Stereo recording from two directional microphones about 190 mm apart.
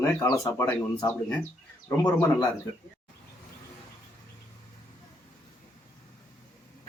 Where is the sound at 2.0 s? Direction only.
20° left (ahead or behind).